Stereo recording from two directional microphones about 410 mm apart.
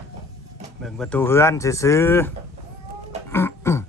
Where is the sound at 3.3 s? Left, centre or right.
Centre.